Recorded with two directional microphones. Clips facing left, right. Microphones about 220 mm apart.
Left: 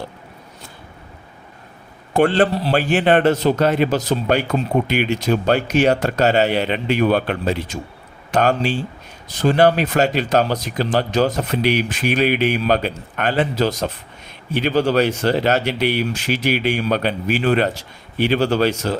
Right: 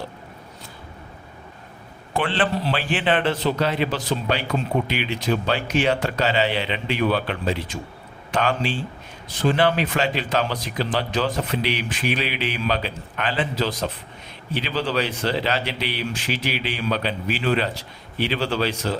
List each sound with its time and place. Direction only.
2.1 s speech: 45° left (ahead or behind)